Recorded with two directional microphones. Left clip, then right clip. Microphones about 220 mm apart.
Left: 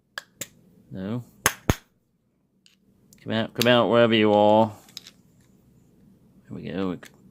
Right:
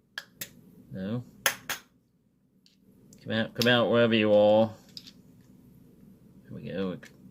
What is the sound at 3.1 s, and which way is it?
Speech, 45° left (ahead or behind).